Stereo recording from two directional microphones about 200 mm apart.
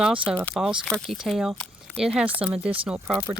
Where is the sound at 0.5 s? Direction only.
5° right (ahead or behind).